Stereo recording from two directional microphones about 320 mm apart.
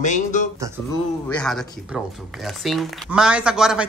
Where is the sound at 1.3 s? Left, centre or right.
Centre.